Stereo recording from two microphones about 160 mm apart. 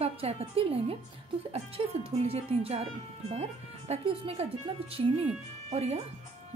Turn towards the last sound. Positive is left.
turn(degrees=-40)  # may be behind; listen again after turning